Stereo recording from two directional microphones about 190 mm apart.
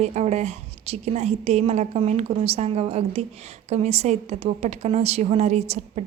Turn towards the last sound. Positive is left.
turn(degrees=-35)  # may be behind; listen again after turning